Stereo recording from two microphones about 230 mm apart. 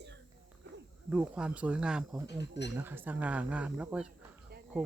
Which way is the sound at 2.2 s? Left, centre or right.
Left.